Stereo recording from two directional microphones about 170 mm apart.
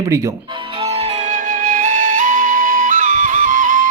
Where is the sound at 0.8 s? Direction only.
40° right (ahead or behind).